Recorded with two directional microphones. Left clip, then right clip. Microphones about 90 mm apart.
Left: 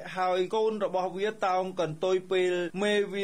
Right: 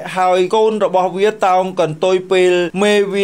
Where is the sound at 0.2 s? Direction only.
35° right (ahead or behind).